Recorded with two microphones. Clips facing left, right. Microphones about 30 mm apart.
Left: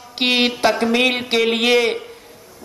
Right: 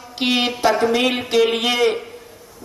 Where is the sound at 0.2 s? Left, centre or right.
Left.